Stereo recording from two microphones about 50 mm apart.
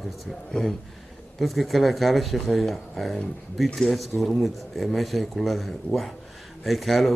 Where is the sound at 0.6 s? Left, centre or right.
Centre.